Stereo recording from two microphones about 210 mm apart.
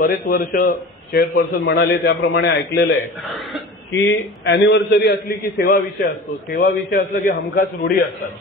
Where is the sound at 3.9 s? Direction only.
55° left (ahead or behind).